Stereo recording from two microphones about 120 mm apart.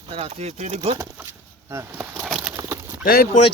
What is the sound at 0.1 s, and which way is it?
Speech, 60° right (ahead or behind).